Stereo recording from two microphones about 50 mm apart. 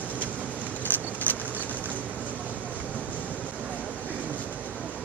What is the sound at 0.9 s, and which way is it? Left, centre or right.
Vehicle, left.